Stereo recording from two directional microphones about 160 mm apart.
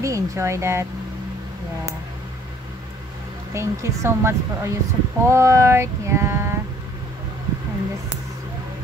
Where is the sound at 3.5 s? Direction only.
15° right (ahead or behind).